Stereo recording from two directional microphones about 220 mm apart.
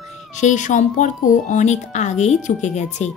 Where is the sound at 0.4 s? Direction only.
35° left (ahead or behind).